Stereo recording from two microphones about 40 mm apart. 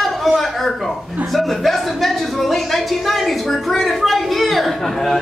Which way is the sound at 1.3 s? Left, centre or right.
Centre.